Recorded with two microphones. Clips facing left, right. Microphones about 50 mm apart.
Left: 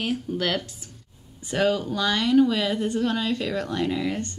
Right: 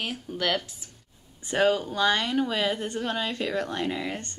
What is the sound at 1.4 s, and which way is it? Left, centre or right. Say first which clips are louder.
A woman's voice: even; right.